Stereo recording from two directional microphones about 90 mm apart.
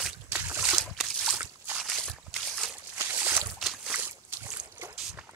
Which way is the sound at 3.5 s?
Centre (ahead or behind).